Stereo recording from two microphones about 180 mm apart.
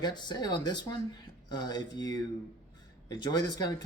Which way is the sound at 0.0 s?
25° left (ahead or behind).